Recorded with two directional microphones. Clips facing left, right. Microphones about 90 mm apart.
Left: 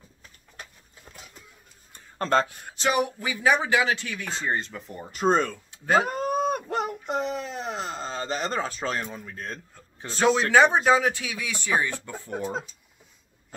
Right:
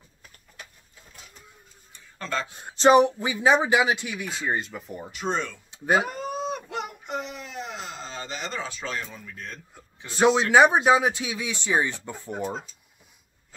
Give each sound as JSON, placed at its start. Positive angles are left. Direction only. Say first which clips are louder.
{"t": 1.9, "sound": "tick-tock", "louder": "left 7 dB", "side_deg": 45}
{"t": 2.4, "sound": "speech", "louder": "right 8 dB", "side_deg": -20}
{"t": 5.1, "sound": "speech", "louder": "left 7 dB", "side_deg": 45}
{"t": 5.7, "sound": "cat", "louder": "right 1 dB", "side_deg": -15}
{"t": 6.0, "sound": "a sound", "louder": "left 5 dB", "side_deg": 45}
{"t": 10.5, "sound": "speech", "louder": "right 1 dB", "side_deg": -15}